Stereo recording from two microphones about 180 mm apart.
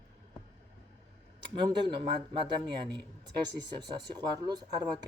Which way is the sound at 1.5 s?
25° right (ahead or behind).